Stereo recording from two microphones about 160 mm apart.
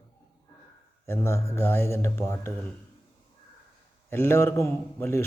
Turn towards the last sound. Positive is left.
turn(degrees=15)  # may be behind; listen again after turning